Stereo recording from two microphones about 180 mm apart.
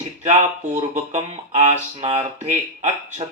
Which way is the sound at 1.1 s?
40° right (ahead or behind).